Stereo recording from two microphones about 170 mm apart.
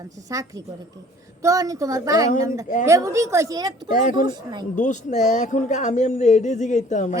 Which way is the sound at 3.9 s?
45° left (ahead or behind).